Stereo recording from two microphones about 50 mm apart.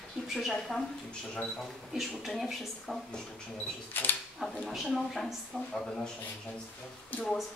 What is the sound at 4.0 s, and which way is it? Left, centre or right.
Speech, left.